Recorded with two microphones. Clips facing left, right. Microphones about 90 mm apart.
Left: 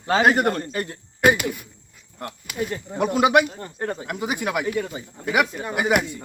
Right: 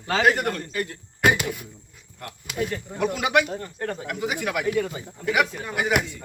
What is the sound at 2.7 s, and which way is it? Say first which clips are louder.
Speech: left 3 dB; 30° left (ahead or behind).